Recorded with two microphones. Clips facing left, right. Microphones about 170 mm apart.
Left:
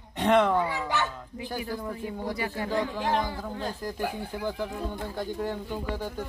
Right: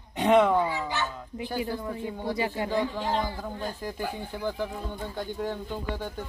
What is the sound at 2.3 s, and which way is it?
Speech, 25° right (ahead or behind).